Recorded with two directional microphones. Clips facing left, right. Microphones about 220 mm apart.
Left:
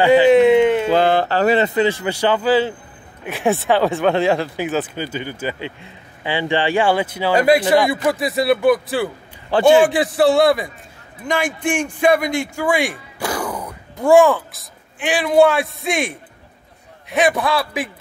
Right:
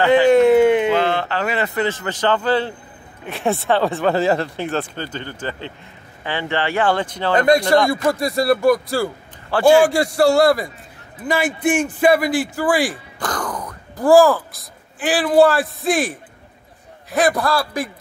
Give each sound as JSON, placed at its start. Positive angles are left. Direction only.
{"t": 0.0, "sound": "speech", "side_deg": 15}
{"t": 0.3, "sound": "a sound", "side_deg": 0}
{"t": 0.8, "sound": "a sound", "side_deg": 35}
{"t": 1.6, "sound": "speech", "side_deg": 20}
{"t": 9.5, "sound": "a man's voice", "side_deg": 20}
{"t": 9.8, "sound": "speech", "side_deg": 0}